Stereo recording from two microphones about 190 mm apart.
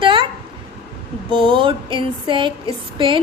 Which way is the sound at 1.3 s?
25° right (ahead or behind).